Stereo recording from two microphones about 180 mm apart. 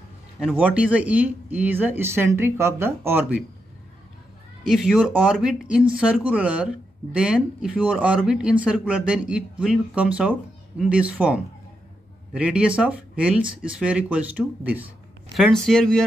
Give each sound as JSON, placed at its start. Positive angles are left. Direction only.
{"t": 0.4, "sound": "speech", "side_deg": -5}
{"t": 4.6, "sound": "speech", "side_deg": -5}
{"t": 15.3, "sound": "speech", "side_deg": 0}